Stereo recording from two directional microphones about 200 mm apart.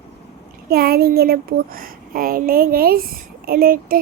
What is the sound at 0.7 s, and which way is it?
A child's voice, 50° right (ahead or behind).